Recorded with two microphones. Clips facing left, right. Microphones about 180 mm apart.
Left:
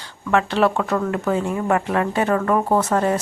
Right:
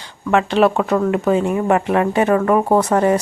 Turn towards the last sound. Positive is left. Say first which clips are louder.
# right 4 dB
turn(degrees=-15)  # may be behind; listen again after turning